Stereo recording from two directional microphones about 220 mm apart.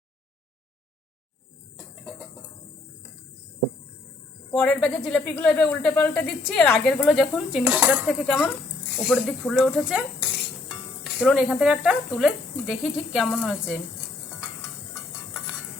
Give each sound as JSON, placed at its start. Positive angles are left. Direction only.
{"t": 4.5, "sound": "speech", "side_deg": 5}
{"t": 11.0, "sound": "speech", "side_deg": 0}